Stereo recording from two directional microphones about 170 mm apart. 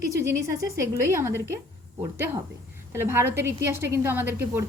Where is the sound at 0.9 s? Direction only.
15° right (ahead or behind).